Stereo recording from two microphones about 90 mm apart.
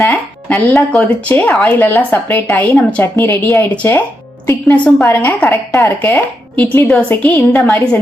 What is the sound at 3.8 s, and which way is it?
A woman's voice, 20° left (ahead or behind).